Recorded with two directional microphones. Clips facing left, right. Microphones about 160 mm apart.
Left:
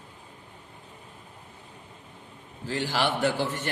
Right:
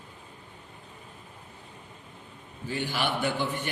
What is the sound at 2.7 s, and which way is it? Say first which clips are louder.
A man's voice: left 3 dB; 90° left.